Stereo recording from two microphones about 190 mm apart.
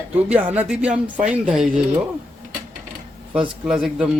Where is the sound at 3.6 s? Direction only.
5° right (ahead or behind).